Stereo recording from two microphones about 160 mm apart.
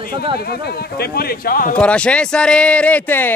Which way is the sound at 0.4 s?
80° left.